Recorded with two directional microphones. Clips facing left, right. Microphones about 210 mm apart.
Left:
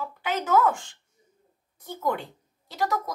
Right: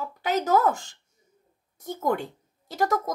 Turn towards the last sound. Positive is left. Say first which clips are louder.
# right 3 dB
turn(degrees=-45)  # may be behind; listen again after turning